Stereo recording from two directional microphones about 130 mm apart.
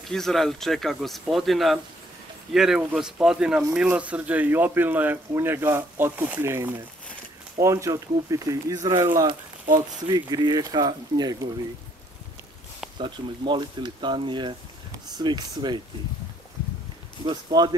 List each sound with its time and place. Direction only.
0.1 s speech: centre (ahead or behind); by 11.3 s 30° right (ahead or behind)
12.9 s speech: 35° right (ahead or behind)
17.2 s speech: 35° right (ahead or behind)